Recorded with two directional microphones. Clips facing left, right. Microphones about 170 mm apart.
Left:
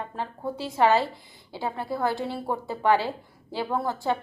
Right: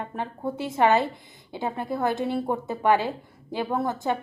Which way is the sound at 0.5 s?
20° right (ahead or behind).